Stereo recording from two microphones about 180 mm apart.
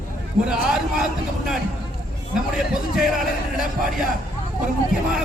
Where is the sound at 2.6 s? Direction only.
Centre (ahead or behind).